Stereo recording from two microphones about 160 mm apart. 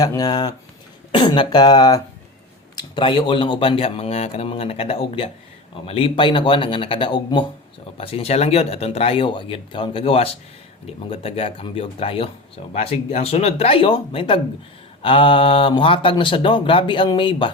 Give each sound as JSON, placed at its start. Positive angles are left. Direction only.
{"t": 0.0, "sound": "speech", "side_deg": 25}